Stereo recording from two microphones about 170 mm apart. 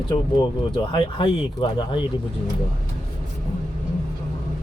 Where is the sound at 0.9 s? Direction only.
30° left (ahead or behind).